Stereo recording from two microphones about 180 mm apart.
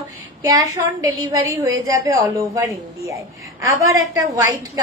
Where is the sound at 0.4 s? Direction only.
20° right (ahead or behind).